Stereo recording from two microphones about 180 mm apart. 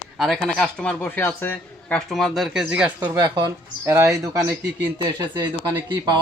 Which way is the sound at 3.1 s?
20° right (ahead or behind).